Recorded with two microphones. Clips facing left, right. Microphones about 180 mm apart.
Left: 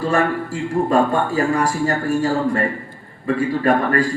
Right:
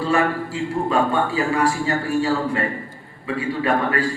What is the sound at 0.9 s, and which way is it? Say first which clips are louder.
A man's voice: left 2 dB; 45° left (ahead or behind).